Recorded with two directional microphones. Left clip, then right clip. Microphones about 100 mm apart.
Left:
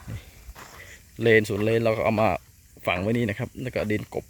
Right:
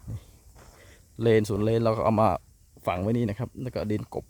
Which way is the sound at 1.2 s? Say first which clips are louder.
Left 3 dB; 50° right (ahead or behind).